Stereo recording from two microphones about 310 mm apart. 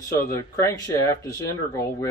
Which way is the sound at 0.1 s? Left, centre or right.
Centre.